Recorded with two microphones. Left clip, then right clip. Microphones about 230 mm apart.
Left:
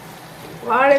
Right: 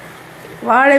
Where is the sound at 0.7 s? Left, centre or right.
Right.